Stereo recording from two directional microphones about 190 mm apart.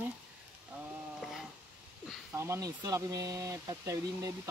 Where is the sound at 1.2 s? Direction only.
Centre (ahead or behind).